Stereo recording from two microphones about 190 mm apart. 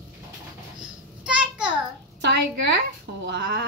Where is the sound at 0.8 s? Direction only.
5° right (ahead or behind).